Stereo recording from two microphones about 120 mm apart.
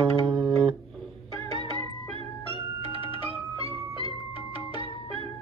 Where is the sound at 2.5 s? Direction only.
50° right (ahead or behind).